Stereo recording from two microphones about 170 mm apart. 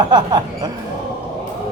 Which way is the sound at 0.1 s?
25° right (ahead or behind).